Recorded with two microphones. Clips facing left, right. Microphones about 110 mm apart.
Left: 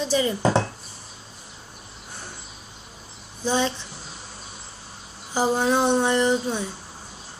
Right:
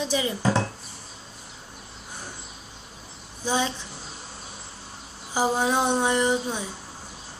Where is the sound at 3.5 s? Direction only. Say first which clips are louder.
Left 2 dB; 15° right (ahead or behind).